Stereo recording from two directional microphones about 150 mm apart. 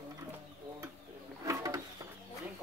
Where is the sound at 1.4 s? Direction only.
20° right (ahead or behind).